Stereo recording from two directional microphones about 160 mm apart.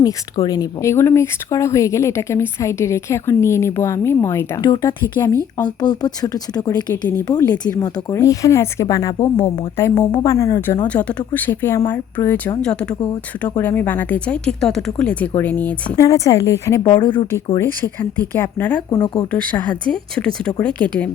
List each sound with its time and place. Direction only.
0.0 s speech: 25° left (ahead or behind)
16.9 s speech: 30° left (ahead or behind)
17.6 s speech: 10° left (ahead or behind)
18.9 s speech: 25° left (ahead or behind)
19.3 s speech: 10° left (ahead or behind)